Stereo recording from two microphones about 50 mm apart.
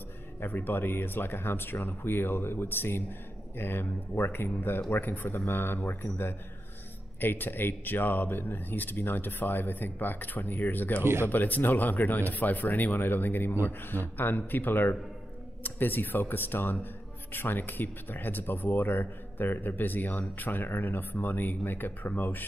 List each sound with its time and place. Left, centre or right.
0.4 s speech: left